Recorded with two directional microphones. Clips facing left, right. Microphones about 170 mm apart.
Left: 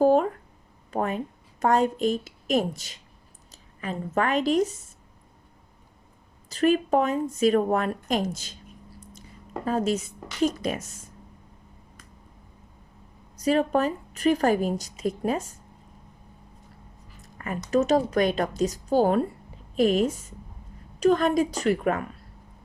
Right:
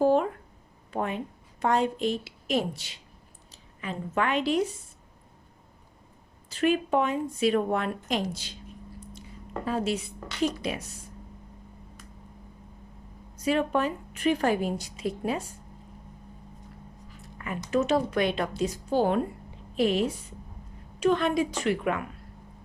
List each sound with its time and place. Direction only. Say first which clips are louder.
0.0 s a sound: left 3 dB; 45° left (ahead or behind)
0.9 s a woman's voice: left 3 dB; 45° left (ahead or behind)
6.5 s speech: left 3 dB; 40° left (ahead or behind)
9.6 s speech: left 4 dB; 45° left (ahead or behind)
13.3 s a woman's voice: left 3 dB; 40° left (ahead or behind)
17.3 s a sound: left 3 dB; 45° left (ahead or behind)
17.7 s a woman's voice: left 3 dB; 40° left (ahead or behind)